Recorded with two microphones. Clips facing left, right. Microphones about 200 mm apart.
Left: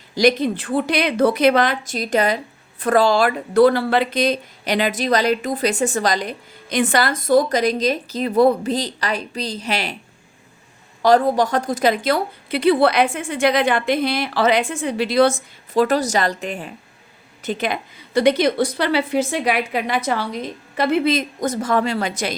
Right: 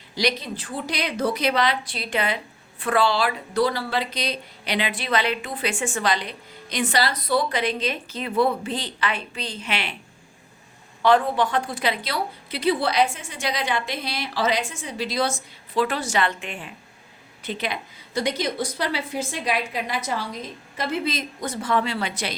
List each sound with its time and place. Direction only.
0.2 s a woman's voice: 50° left (ahead or behind)
11.0 s a woman's voice: 40° left (ahead or behind); by 15.3 s 60° left (ahead or behind)
15.7 s a woman's voice: 40° left (ahead or behind)